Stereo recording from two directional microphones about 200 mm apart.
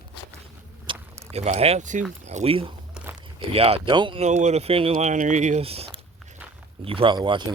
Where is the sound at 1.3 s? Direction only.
30° right (ahead or behind).